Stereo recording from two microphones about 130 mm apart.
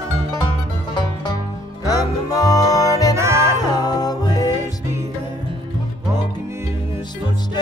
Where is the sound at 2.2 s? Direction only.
30° left (ahead or behind).